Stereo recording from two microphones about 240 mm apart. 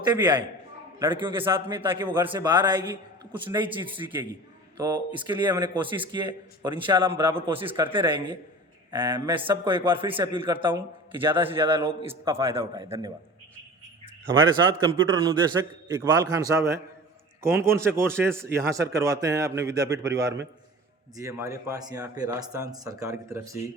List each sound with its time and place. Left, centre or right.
0.0 s a man's voice: centre
12.3 s speech: centre
14.3 s speech: centre